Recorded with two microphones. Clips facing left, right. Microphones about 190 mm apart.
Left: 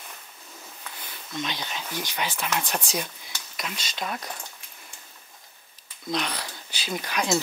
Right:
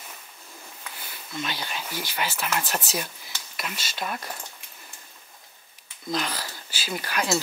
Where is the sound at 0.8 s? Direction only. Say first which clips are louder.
Even; 5° right (ahead or behind).